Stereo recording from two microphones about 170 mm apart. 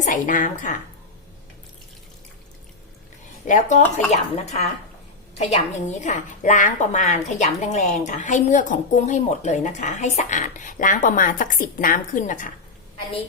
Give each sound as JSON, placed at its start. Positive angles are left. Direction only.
{"t": 0.0, "sound": "a woman's voice", "side_deg": 50}
{"t": 3.4, "sound": "a woman's voice", "side_deg": 45}